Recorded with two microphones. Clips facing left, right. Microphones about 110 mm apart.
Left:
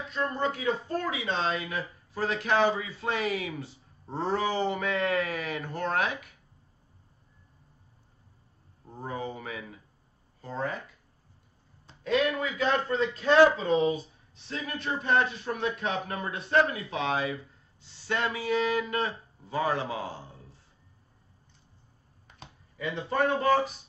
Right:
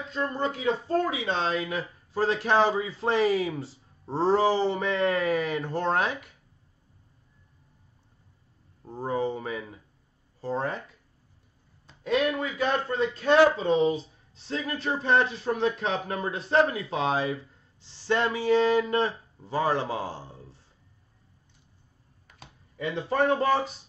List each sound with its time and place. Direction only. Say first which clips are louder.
0.1 s speech: right 1 dB; 25° right (ahead or behind)
8.8 s speech: right 7 dB; 30° right (ahead or behind)
12.1 s speech: right 1 dB; 30° right (ahead or behind)
23.0 s speech: right 1 dB; 30° right (ahead or behind)